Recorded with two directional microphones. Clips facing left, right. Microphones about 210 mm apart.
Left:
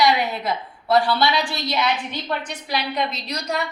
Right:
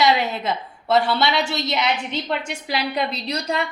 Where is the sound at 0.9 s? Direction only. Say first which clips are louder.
Even; 25° right (ahead or behind).